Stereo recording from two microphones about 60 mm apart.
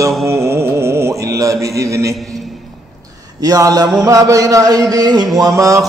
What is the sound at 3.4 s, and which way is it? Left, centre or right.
Speech, right.